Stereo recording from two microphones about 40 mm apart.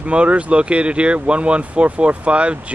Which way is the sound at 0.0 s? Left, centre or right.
Right.